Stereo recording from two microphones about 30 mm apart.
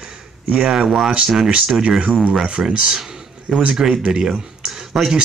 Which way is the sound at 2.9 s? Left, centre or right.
Centre.